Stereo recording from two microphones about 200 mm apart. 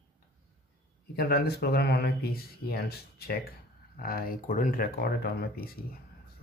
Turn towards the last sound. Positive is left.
turn(degrees=50)  # may be behind; listen again after turning